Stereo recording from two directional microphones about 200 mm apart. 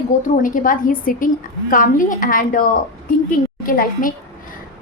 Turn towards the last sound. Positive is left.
turn(degrees=45)  # may be behind; listen again after turning